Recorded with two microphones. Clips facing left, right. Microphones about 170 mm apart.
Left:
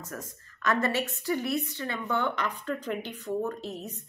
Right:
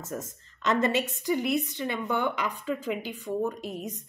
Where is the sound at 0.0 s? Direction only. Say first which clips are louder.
Right 4 dB; 25° right (ahead or behind).